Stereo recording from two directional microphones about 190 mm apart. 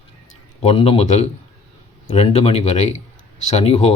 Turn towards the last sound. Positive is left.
turn(degrees=35)  # may be behind; listen again after turning